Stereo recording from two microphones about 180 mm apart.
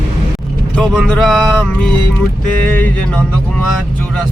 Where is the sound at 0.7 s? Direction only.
5° left (ahead or behind).